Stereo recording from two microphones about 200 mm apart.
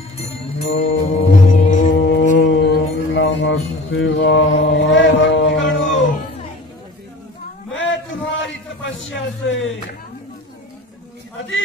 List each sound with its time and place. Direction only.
0.2 s music: 55° left (ahead or behind)
1.0 s music: 40° left (ahead or behind)
2.0 s music: 60° left (ahead or behind)
7.7 s a sound: 65° left (ahead or behind)